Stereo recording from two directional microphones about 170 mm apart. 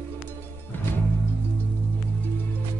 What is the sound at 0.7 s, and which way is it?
Music, 10° left (ahead or behind).